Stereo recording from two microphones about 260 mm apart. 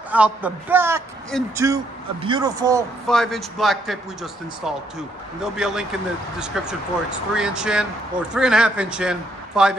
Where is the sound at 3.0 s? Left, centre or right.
Centre.